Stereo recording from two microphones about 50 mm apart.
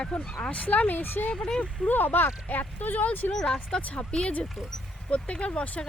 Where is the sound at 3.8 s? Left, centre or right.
Left.